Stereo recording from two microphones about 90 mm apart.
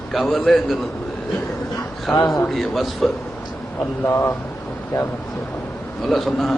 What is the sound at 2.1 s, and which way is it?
Speech, 40° left (ahead or behind).